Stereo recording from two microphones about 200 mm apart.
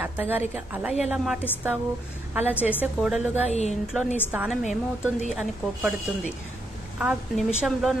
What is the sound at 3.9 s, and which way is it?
Speech, 10° left (ahead or behind).